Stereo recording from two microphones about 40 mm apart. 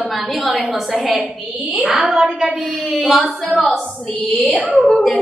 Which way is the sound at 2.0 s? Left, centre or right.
Centre.